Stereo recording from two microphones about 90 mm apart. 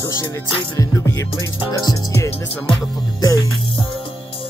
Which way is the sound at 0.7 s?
35° left (ahead or behind).